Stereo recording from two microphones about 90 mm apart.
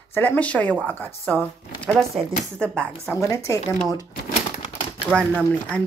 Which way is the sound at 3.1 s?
35° left (ahead or behind).